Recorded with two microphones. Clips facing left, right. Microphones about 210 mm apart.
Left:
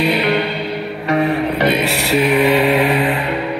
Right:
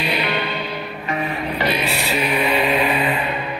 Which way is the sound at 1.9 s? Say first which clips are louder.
Left 6 dB; 80° left.